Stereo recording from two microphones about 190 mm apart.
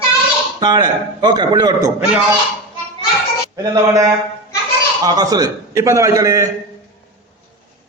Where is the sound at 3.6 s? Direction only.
15° right (ahead or behind).